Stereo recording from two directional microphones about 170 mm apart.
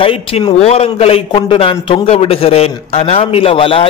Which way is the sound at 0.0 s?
30° left (ahead or behind).